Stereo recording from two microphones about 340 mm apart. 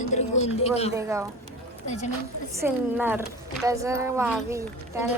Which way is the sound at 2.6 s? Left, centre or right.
Centre.